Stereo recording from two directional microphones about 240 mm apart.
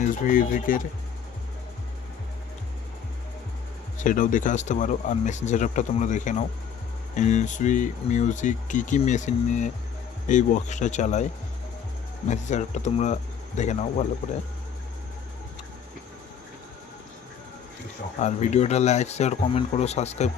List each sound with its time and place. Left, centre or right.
0.0 s speech: left
3.9 s speech: left
12.3 s speech: left
18.2 s speech: left